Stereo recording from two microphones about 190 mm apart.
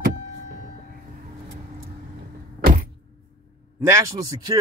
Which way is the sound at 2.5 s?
50° right (ahead or behind).